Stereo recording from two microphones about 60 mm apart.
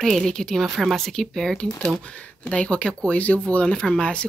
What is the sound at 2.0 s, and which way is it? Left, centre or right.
Speech, centre.